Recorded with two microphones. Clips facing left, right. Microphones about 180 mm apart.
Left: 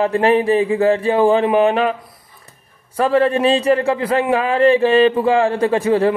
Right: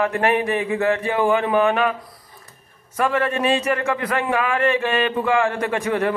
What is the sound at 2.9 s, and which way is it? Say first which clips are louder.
Speech: left 6 dB; 35° left (ahead or behind).